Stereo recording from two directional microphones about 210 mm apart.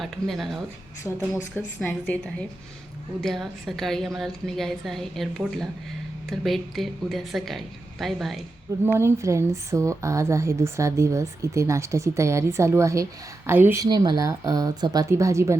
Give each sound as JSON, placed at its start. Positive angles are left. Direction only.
{"t": 0.0, "sound": "a woman's voice", "side_deg": 0}
{"t": 1.8, "sound": "a woman's voice", "side_deg": 5}
{"t": 3.2, "sound": "a woman's voice", "side_deg": 0}
{"t": 8.8, "sound": "a woman's voice", "side_deg": -10}